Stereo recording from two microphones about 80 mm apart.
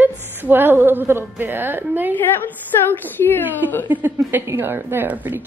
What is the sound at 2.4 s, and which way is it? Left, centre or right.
A woman's voice, left.